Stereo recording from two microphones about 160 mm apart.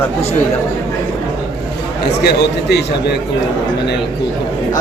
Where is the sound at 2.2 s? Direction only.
90° left.